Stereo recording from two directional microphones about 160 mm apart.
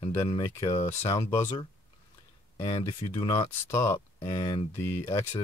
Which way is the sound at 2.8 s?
20° left (ahead or behind).